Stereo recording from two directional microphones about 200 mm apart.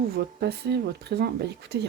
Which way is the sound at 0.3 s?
55° right (ahead or behind).